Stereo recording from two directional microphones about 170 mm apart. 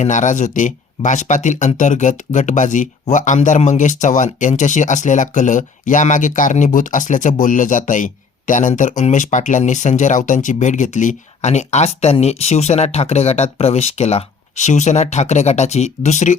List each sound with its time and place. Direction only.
0.0 s speech: 45° left (ahead or behind)